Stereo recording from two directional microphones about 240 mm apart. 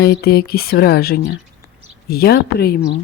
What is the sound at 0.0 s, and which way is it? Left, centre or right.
Speech, left.